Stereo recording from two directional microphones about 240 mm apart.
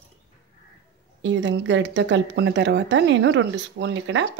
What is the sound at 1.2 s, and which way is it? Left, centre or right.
Speech, right.